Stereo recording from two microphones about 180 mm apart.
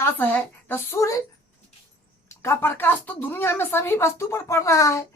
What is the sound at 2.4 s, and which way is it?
Speech, 15° left (ahead or behind).